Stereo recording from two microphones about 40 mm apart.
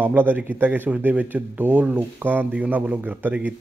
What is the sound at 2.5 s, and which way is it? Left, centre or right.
A man's voice, right.